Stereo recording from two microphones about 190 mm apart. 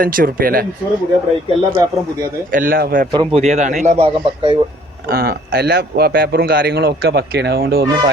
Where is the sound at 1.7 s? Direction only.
20° right (ahead or behind).